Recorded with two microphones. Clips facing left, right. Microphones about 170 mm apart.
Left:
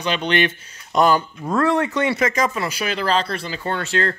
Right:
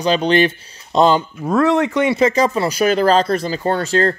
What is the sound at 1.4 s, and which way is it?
Speech, 10° right (ahead or behind).